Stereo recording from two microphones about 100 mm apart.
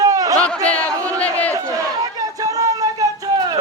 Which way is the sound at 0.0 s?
35° right (ahead or behind).